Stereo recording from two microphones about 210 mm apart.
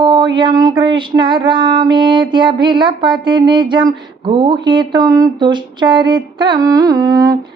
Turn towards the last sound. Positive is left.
turn(degrees=-20)  # may be behind; listen again after turning